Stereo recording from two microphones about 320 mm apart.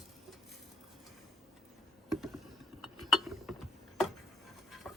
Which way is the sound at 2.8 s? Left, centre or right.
Centre.